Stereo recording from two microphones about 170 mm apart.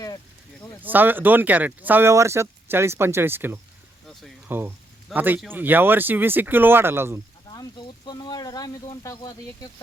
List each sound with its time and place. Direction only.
0.8 s speech: 10° right (ahead or behind)
7.5 s speech: 25° left (ahead or behind)